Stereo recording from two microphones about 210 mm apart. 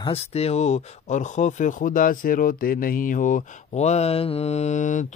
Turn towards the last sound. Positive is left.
turn(degrees=35)  # may be behind; listen again after turning